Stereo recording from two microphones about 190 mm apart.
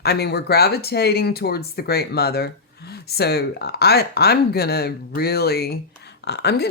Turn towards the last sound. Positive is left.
turn(degrees=60)  # may be behind; listen again after turning